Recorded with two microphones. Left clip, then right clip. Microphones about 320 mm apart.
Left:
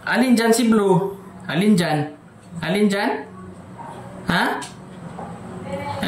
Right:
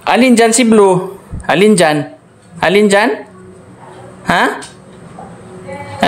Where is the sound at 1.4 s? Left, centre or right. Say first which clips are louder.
Right 12 dB; centre.